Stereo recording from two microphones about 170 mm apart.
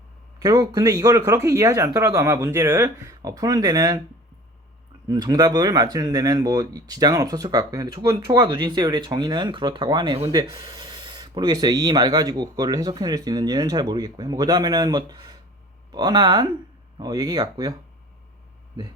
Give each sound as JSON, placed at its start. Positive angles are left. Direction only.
{"t": 0.3, "sound": "speech", "side_deg": -20}
{"t": 5.0, "sound": "speech", "side_deg": -20}